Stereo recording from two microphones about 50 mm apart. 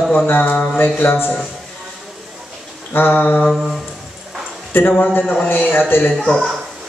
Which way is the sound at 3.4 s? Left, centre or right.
Centre.